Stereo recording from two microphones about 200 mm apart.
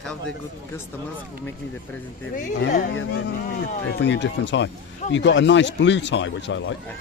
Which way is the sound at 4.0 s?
60° left (ahead or behind).